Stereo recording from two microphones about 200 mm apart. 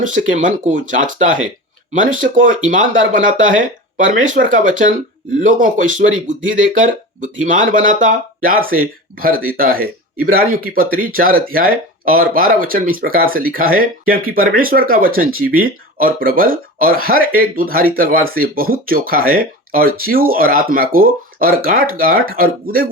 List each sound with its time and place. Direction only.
0.0 s speech: 40° right (ahead or behind)